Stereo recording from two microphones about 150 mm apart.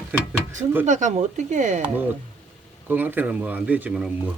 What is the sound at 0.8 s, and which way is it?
Speech, 55° right (ahead or behind).